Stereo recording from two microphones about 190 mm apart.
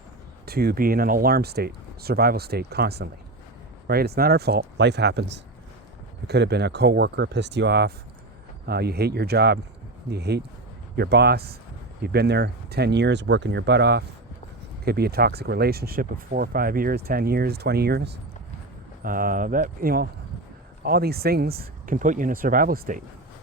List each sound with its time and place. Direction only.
0.4 s speech: 55° right (ahead or behind)
19.0 s speech: 45° right (ahead or behind)
21.6 s speech: 45° right (ahead or behind)